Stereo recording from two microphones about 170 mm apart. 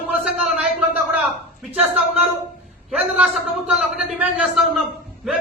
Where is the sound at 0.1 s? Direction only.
5° right (ahead or behind).